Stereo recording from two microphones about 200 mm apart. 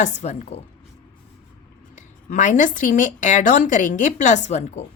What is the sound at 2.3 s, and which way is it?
A woman's voice, 40° left (ahead or behind).